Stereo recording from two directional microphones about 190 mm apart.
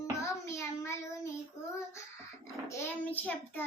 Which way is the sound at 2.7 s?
10° left (ahead or behind).